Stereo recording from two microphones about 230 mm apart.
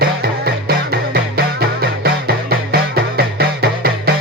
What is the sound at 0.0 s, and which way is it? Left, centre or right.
Music, right.